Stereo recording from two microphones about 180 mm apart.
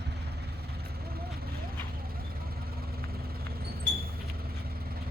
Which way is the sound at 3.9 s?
75° right (ahead or behind).